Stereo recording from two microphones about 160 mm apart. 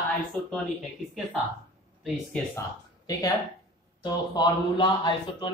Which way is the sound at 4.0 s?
30° left (ahead or behind).